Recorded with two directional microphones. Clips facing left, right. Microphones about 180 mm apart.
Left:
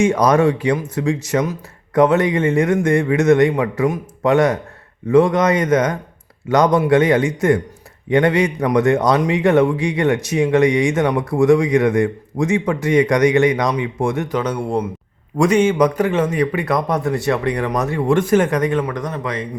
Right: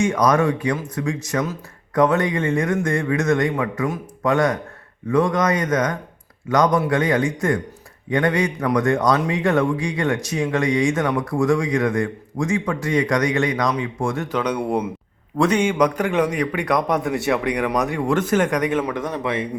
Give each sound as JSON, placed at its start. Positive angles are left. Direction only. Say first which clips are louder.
{"t": 0.0, "sound": "a man's voice", "louder": "left 4 dB", "side_deg": 30}
{"t": 18.8, "sound": "a man's voice", "louder": "left 2 dB", "side_deg": -5}
{"t": 19.0, "sound": "speech", "louder": "even", "side_deg": -20}